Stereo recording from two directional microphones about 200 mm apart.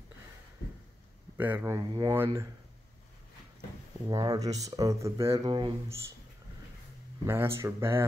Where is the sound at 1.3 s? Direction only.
10° right (ahead or behind).